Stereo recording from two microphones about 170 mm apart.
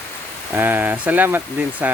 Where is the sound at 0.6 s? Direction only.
10° right (ahead or behind).